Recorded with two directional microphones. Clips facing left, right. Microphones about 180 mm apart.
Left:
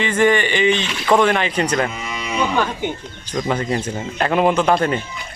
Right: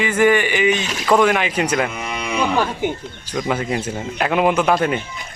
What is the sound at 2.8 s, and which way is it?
Speech, 5° right (ahead or behind).